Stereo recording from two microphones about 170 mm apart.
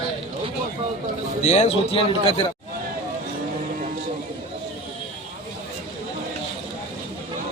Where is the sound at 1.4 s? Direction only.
40° left (ahead or behind).